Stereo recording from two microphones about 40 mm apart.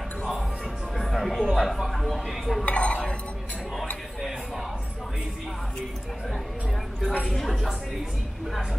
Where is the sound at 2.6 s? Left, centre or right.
Left.